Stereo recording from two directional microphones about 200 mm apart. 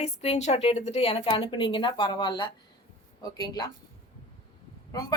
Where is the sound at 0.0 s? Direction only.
35° left (ahead or behind).